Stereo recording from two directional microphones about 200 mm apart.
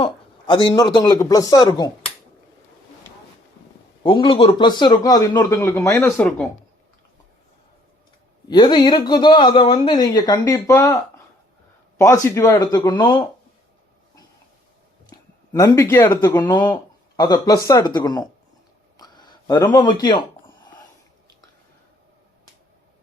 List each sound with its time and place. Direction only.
0.0 s speech: 25° left (ahead or behind)
4.0 s speech: 25° left (ahead or behind); by 6.5 s 10° left (ahead or behind)
8.4 s speech: 20° left (ahead or behind)
11.9 s speech: 15° left (ahead or behind)
15.1 s speech: 15° left (ahead or behind)